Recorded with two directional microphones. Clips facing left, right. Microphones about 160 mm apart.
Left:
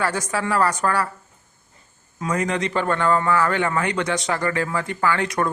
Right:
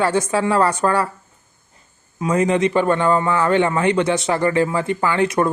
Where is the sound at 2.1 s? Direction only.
25° right (ahead or behind).